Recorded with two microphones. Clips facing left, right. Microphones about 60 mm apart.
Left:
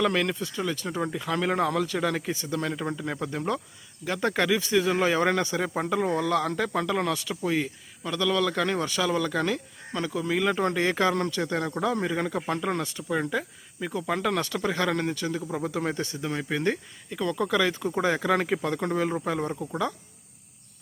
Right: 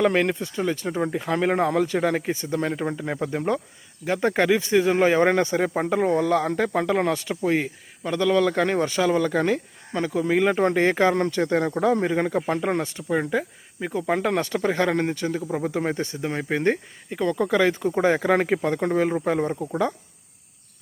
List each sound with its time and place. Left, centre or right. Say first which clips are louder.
0.0 s speech: right 4 dB; right